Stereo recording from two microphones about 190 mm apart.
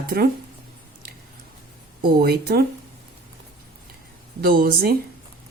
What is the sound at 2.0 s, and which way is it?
Speech, 55° right (ahead or behind).